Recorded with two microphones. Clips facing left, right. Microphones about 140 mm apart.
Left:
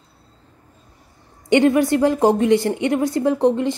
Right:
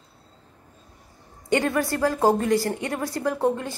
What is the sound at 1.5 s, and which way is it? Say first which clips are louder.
A woman's voice: left 8 dB; 20° left (ahead or behind).